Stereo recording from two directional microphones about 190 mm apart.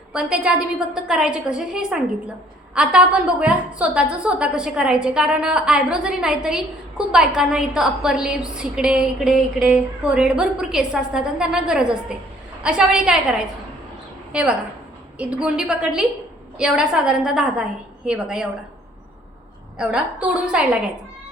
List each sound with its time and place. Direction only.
0.1 s a woman's voice: 5° right (ahead or behind)
14.3 s a woman's voice: 5° right (ahead or behind)
19.8 s a woman's voice: 5° right (ahead or behind)